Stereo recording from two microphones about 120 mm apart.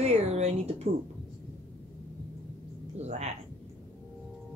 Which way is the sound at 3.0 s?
70° right (ahead or behind).